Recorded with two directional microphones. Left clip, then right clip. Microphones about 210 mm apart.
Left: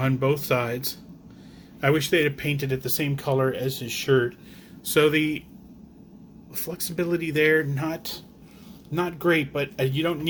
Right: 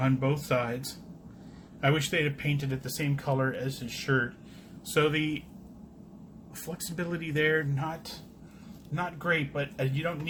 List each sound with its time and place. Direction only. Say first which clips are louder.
0.0 s speech: left 5 dB; 45° left (ahead or behind)
4.9 s speech: left 6 dB; 40° left (ahead or behind)
6.7 s speech: left 9 dB; 35° left (ahead or behind)
9.0 s speech: left 6 dB; 50° left (ahead or behind)